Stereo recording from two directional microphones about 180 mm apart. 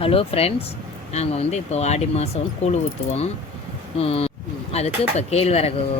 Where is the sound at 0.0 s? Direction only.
30° left (ahead or behind).